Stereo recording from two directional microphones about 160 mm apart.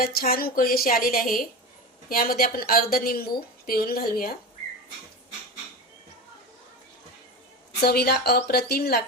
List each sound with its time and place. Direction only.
0.0 s a woman's voice: 70° left (ahead or behind)
7.8 s speech: 80° left